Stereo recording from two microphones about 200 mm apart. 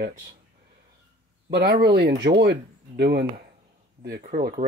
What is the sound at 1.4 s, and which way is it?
Speech, 55° right (ahead or behind).